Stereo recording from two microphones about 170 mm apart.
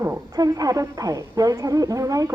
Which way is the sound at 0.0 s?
20° right (ahead or behind).